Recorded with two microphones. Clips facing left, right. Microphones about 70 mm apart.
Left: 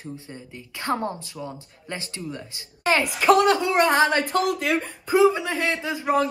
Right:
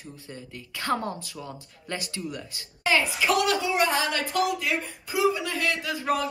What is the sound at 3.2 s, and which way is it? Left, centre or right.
Speech, left.